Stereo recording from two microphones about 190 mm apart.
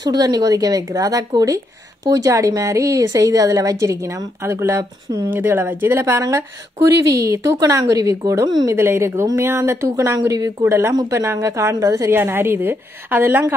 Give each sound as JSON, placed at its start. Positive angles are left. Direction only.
{"t": 0.0, "sound": "speech", "side_deg": -20}